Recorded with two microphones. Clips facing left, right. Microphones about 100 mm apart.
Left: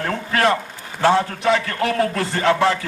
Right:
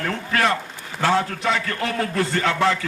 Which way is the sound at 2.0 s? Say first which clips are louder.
Left 2 dB; 30° left (ahead or behind).